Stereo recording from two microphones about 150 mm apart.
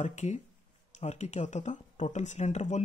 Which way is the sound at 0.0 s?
50° left (ahead or behind).